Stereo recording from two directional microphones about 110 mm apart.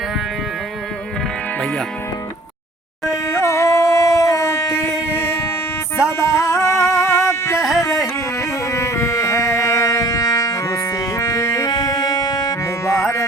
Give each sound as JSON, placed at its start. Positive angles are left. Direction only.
{"t": 3.1, "sound": "howl", "side_deg": 25}
{"t": 4.8, "sound": "train", "side_deg": -10}
{"t": 6.1, "sound": "music", "side_deg": 25}